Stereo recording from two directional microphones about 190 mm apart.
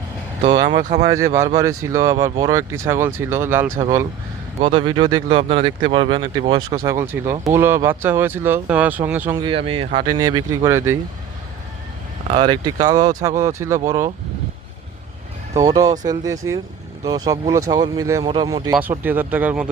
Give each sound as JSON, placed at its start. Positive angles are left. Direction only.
{"t": 0.4, "sound": "speech", "side_deg": -25}
{"t": 0.8, "sound": "speech", "side_deg": -40}
{"t": 1.0, "sound": "speech", "side_deg": -15}
{"t": 4.6, "sound": "speech", "side_deg": -30}
{"t": 9.4, "sound": "speech", "side_deg": -30}
{"t": 12.3, "sound": "speech", "side_deg": -25}
{"t": 15.6, "sound": "speech", "side_deg": -20}
{"t": 18.7, "sound": "speech", "side_deg": -10}